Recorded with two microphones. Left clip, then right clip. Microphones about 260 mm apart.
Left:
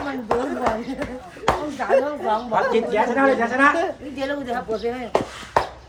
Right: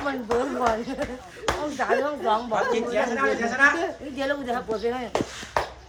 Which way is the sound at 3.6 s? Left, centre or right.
Left.